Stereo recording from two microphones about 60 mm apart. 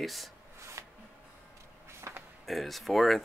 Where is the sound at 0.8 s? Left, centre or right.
Right.